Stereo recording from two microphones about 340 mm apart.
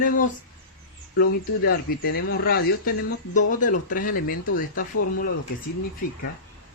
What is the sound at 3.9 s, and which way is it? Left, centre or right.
Speech, left.